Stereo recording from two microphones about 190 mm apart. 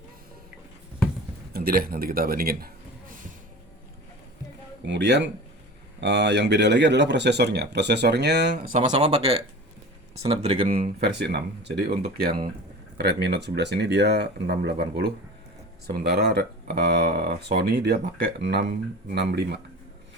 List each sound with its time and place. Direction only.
1.5 s a man's voice: 55° right (ahead or behind)
4.9 s speech: 70° right (ahead or behind)
8.8 s speech: 35° right (ahead or behind)
10.4 s speech: 30° right (ahead or behind)
11.0 s speech: 60° right (ahead or behind)